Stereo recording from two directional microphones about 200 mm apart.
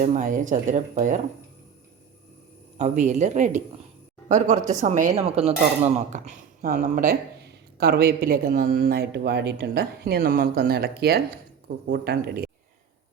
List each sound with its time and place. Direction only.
0.0 s speech: 40° right (ahead or behind)
2.7 s speech: 35° right (ahead or behind)